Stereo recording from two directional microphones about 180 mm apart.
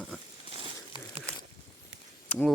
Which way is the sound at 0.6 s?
30° right (ahead or behind).